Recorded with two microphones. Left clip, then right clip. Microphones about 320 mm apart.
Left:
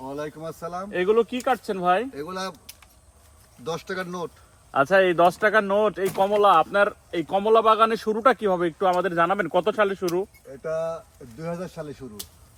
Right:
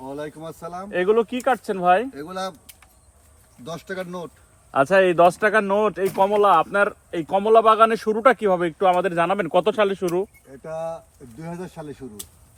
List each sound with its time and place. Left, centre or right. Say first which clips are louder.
0.0 s speech: even; centre
0.9 s speech: right 2 dB; right
2.1 s speech: right 2 dB; centre
4.7 s speech: right 2 dB; right
10.6 s speech: left 2 dB; centre